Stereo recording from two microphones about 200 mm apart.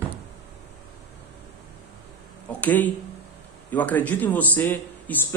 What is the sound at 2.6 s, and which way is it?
Speech, 10° left (ahead or behind).